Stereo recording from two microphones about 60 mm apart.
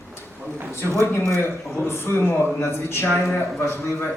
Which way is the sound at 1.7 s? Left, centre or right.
Left.